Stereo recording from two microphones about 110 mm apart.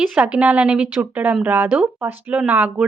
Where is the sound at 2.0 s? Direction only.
20° right (ahead or behind).